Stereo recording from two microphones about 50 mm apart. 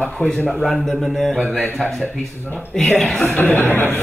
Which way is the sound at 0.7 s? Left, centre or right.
Centre.